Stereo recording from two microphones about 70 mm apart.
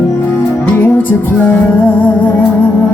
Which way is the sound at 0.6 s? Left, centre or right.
Left.